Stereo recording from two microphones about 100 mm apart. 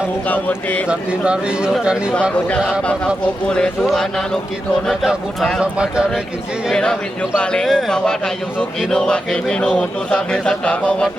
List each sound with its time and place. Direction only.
0.3 s speech: 15° left (ahead or behind)
0.9 s speech: 10° right (ahead or behind)
3.5 s speech: 5° left (ahead or behind)
6.7 s speech: 5° left (ahead or behind)